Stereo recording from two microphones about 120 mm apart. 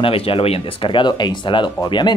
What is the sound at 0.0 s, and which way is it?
Speech, 50° left (ahead or behind).